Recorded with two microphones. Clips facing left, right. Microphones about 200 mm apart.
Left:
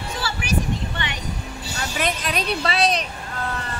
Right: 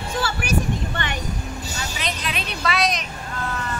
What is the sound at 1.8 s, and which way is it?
Vehicle, 50° left (ahead or behind).